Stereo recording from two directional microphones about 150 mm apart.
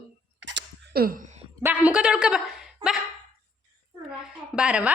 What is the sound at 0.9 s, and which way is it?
Speech, 75° right (ahead or behind).